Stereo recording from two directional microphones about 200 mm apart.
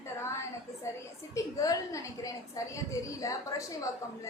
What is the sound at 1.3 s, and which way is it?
A woman's voice, 15° left (ahead or behind).